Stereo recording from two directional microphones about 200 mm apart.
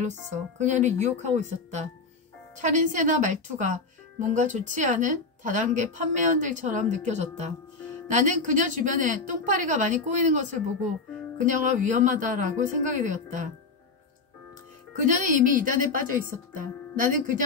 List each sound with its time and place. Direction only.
0.0 s speech: 35° right (ahead or behind)
15.0 s speech: 40° right (ahead or behind)